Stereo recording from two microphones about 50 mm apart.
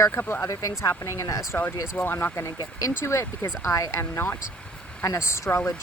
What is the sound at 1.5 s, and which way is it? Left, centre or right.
Speech, left.